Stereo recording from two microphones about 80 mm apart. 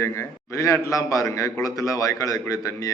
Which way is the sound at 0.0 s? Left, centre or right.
Left.